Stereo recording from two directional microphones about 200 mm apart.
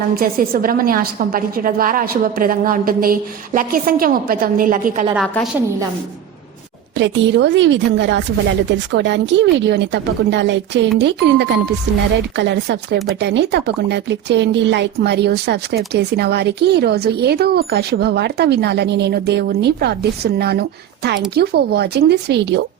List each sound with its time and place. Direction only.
0.2 s a woman's voice: 45° right (ahead or behind)
5.1 s a woman's voice: centre (ahead or behind)
6.9 s speech: 65° right (ahead or behind)